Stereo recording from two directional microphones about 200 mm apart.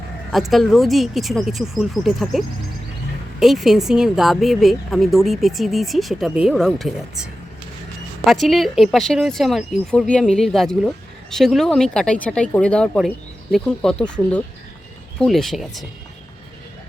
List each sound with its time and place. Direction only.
0.3 s speech: centre (ahead or behind)
3.4 s speech: centre (ahead or behind)